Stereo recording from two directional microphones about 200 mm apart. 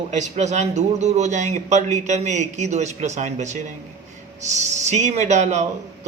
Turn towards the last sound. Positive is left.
turn(degrees=-35)  # may be behind; listen again after turning